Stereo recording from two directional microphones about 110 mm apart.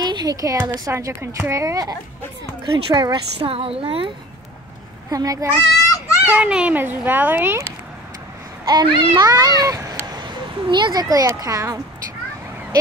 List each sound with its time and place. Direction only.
0.0 s a woman's voice: 40° right (ahead or behind)
2.6 s speech: 40° right (ahead or behind)
3.3 s a woman's voice: 60° right (ahead or behind)
5.1 s a child's voice: 30° right (ahead or behind)
6.2 s a child's voice: 15° right (ahead or behind)
8.6 s a child's voice: 40° right (ahead or behind)
10.2 s speech: 45° right (ahead or behind)